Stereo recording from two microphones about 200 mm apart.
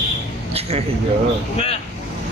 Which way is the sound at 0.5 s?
30° right (ahead or behind).